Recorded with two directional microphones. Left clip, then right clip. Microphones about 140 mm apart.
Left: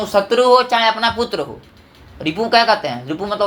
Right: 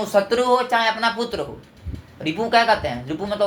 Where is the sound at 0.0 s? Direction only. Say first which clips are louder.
Left 4 dB; 30° left (ahead or behind).